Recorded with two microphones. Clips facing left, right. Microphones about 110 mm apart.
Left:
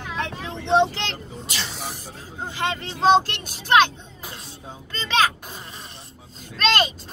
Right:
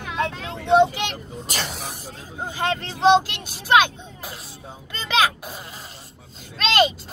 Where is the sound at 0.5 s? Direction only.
5° right (ahead or behind).